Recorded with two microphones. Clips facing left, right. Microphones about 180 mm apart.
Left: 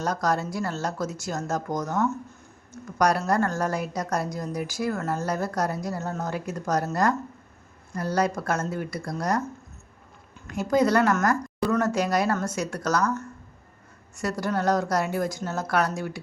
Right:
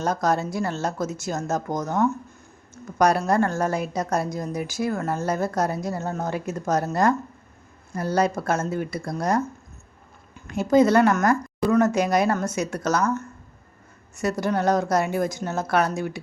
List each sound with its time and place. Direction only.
0.0 s a woman's voice: 25° right (ahead or behind)
7.9 s a woman's voice: 25° right (ahead or behind)
10.4 s a woman's voice: 25° right (ahead or behind)